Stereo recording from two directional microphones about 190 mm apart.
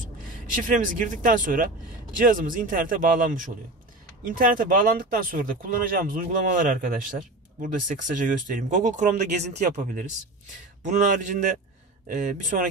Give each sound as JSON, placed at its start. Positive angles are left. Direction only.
{"t": 0.0, "sound": "speech", "side_deg": -45}